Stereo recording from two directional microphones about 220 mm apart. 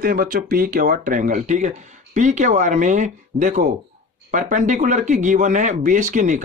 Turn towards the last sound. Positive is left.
turn(degrees=-35)  # may be behind; listen again after turning